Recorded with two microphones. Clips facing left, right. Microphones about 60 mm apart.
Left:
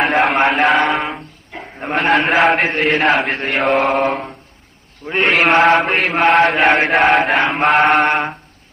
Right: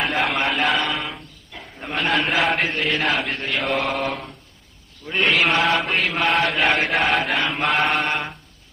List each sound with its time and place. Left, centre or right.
0.0 s a sound: left
1.6 s a man's voice: left
2.4 s mantra: left